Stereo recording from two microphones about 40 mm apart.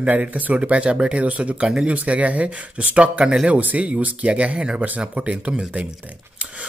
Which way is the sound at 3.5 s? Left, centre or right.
Right.